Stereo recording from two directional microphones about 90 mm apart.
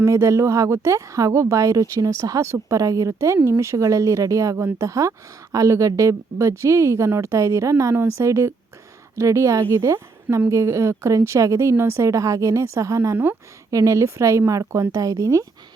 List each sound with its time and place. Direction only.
0.0 s speech: 30° right (ahead or behind)